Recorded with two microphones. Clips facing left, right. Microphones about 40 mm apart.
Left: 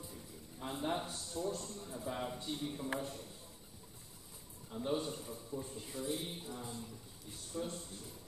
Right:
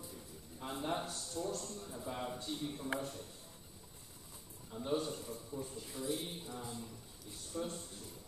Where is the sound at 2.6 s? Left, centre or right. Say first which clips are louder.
Left 1 dB; centre.